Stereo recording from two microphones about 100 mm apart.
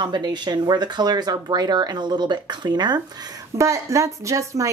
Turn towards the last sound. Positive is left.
turn(degrees=-30)  # may be behind; listen again after turning